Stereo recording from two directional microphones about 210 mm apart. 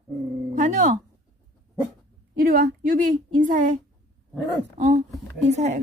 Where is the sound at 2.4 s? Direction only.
40° right (ahead or behind).